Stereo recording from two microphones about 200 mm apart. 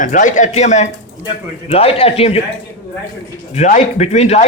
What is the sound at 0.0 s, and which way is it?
Speech, 40° left (ahead or behind).